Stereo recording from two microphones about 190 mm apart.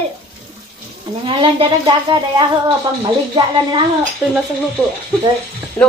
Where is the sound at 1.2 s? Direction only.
25° right (ahead or behind).